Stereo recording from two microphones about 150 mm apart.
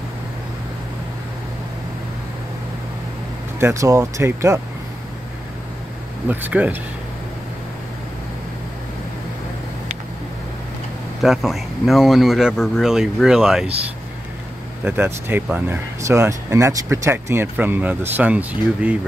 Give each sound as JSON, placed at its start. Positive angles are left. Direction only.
{"t": 3.5, "sound": "speech", "side_deg": -20}
{"t": 6.2, "sound": "speech", "side_deg": -10}
{"t": 11.2, "sound": "speech", "side_deg": 0}
{"t": 14.9, "sound": "speech", "side_deg": -15}